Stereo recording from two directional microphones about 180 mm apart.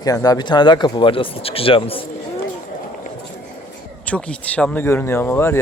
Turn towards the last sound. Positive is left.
turn(degrees=10)  # may be behind; listen again after turning